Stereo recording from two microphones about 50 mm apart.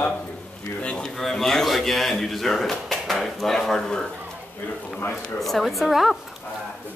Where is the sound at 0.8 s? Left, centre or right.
Left.